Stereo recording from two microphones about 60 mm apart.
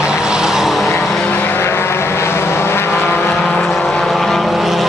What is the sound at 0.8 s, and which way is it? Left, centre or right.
Vehicle, left.